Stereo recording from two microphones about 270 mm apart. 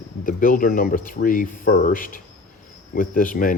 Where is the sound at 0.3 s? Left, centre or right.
Left.